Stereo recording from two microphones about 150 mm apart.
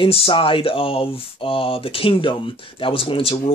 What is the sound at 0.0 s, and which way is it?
Speech, 40° left (ahead or behind).